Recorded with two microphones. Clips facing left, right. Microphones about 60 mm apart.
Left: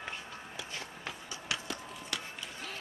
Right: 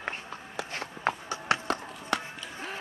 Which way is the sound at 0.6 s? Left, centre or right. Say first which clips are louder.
Right 12 dB; right.